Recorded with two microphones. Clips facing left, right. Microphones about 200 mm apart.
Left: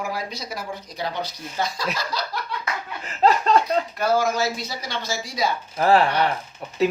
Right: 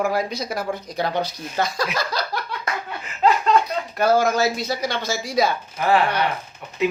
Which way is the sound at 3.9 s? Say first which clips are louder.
Right 7 dB; 60° right (ahead or behind).